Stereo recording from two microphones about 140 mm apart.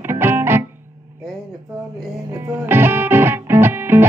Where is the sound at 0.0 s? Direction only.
15° right (ahead or behind).